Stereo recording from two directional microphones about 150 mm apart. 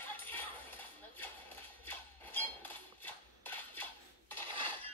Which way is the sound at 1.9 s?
10° left (ahead or behind).